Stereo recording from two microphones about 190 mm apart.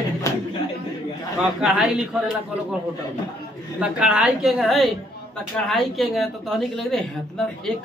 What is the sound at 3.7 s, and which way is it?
Speech, 5° right (ahead or behind).